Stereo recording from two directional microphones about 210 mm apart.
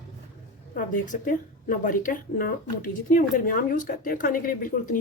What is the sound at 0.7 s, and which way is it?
Speech, 40° left (ahead or behind).